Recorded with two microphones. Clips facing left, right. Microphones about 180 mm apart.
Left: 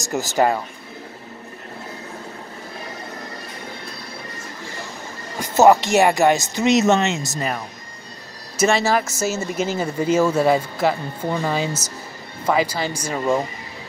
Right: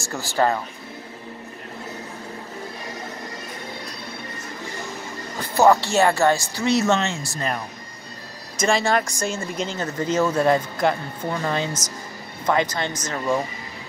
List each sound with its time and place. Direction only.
0.1 s speech: 20° left (ahead or behind)
5.5 s speech: 20° left (ahead or behind)
8.5 s speech: 5° left (ahead or behind)